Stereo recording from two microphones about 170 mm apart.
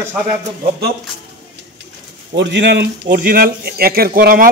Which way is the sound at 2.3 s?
90° right.